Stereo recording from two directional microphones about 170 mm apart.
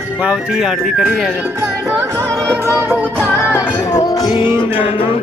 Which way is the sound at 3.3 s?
15° left (ahead or behind).